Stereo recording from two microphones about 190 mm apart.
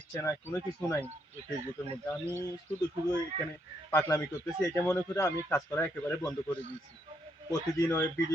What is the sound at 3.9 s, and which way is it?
Speech, 15° left (ahead or behind).